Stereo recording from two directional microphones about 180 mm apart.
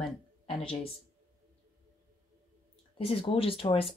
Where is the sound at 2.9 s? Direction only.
30° left (ahead or behind).